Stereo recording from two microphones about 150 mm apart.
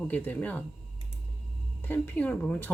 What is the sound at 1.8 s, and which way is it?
Speech, 15° left (ahead or behind).